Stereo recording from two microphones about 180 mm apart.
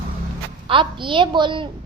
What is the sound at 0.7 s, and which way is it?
A child's voice, 25° right (ahead or behind).